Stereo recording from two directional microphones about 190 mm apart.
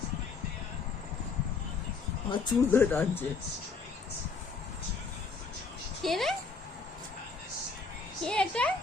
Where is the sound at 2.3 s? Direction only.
20° left (ahead or behind).